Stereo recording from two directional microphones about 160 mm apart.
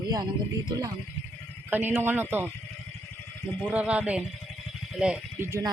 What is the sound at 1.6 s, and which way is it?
Speech, 10° right (ahead or behind).